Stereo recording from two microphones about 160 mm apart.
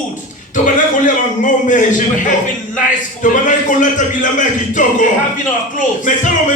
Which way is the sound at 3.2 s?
55° left (ahead or behind).